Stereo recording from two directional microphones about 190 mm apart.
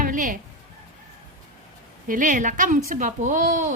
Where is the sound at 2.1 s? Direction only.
45° right (ahead or behind).